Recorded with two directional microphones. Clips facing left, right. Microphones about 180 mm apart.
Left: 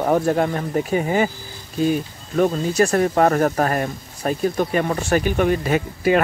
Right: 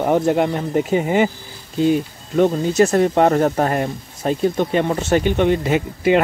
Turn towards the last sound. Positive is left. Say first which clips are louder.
# right 2 dB
turn(degrees=-20)  # may be behind; listen again after turning